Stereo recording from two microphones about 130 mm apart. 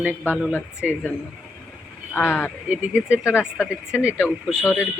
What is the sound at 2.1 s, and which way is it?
Speech, 15° left (ahead or behind).